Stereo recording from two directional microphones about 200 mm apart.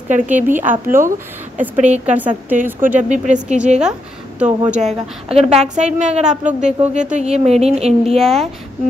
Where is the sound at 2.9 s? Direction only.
35° right (ahead or behind).